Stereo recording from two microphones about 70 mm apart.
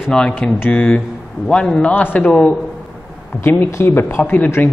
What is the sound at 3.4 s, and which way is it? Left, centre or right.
Speech, left.